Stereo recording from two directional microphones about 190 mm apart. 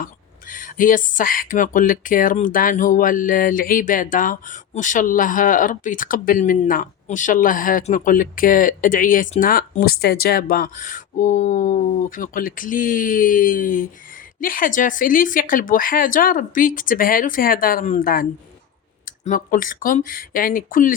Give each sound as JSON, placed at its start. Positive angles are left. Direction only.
{"t": 0.0, "sound": "speech", "side_deg": 45}